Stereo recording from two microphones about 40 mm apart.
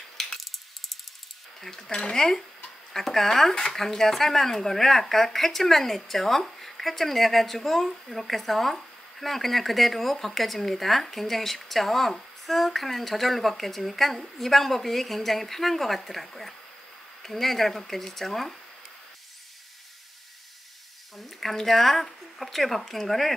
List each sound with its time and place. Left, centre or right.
0.2 s coin: centre
1.6 s speech: centre
21.2 s speech: centre